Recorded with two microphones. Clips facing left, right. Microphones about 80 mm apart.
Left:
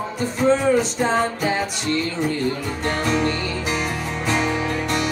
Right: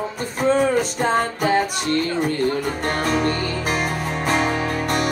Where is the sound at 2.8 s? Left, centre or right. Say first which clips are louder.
Left 1 dB; right.